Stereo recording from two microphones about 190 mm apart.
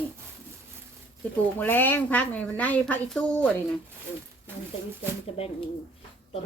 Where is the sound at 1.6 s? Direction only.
10° left (ahead or behind).